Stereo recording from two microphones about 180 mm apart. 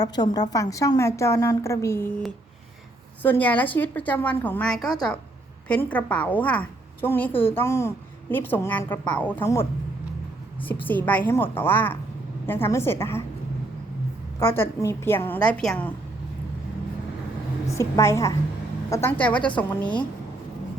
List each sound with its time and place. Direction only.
0.0 s a woman's voice: 20° left (ahead or behind)
3.2 s a woman's voice: 10° left (ahead or behind)
10.8 s a woman's voice: 10° left (ahead or behind)
14.3 s a woman's voice: 10° left (ahead or behind)
17.7 s a woman's voice: 15° left (ahead or behind)